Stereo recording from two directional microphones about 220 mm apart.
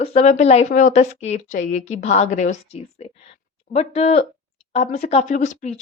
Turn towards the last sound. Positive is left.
turn(degrees=35)  # may be behind; listen again after turning